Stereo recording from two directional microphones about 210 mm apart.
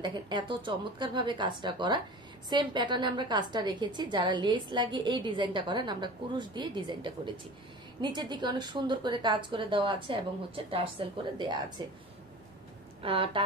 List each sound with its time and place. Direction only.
0.0 s a woman's voice: 20° right (ahead or behind)
13.0 s a woman's voice: 25° right (ahead or behind)